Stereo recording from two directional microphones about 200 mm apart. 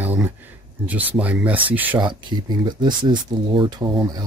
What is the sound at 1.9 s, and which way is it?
Speech, 20° right (ahead or behind).